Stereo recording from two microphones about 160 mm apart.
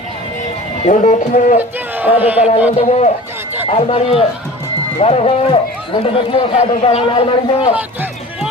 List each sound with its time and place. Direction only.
0.9 s speech: 50° left (ahead or behind)
2.1 s speech: 10° right (ahead or behind)
2.8 s speech: 45° left (ahead or behind)